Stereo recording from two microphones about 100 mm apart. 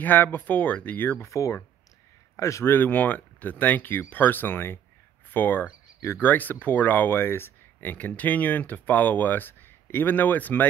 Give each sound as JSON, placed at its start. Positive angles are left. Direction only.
{"t": 0.0, "sound": "speech", "side_deg": 20}
{"t": 1.3, "sound": "speech", "side_deg": 30}